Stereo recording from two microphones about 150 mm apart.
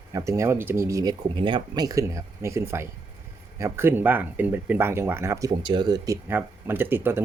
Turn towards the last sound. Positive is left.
turn(degrees=-15)  # may be behind; listen again after turning